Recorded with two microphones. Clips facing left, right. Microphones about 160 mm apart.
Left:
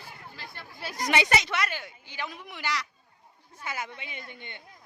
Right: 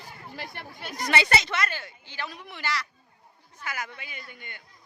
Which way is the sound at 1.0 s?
15° left (ahead or behind).